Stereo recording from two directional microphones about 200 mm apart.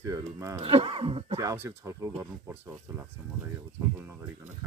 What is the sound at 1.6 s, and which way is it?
Speech, 15° right (ahead or behind).